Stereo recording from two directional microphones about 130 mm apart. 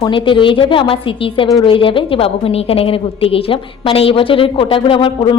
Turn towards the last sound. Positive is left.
turn(degrees=40)  # may be behind; listen again after turning